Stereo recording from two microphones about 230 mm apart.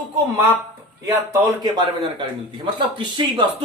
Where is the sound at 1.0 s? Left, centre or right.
Centre.